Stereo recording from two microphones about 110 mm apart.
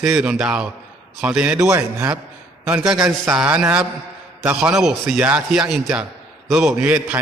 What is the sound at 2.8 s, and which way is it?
A man's voice, 5° right (ahead or behind).